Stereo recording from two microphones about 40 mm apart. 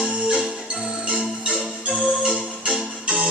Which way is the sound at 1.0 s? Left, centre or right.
Right.